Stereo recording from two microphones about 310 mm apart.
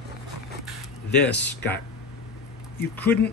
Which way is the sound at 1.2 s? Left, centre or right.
Left.